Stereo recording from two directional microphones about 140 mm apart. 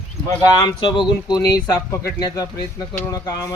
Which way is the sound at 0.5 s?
30° left (ahead or behind).